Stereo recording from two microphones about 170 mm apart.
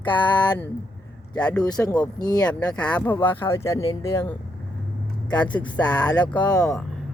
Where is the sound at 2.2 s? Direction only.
25° left (ahead or behind).